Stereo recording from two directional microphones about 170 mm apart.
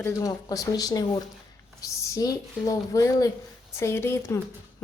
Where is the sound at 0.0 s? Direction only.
20° left (ahead or behind).